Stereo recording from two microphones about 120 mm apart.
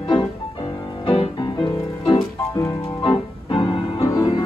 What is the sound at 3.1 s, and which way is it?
Keyboard, 45° left (ahead or behind).